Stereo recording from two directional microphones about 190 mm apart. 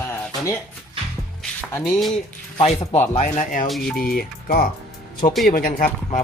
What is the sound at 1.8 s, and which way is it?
Speech, centre (ahead or behind).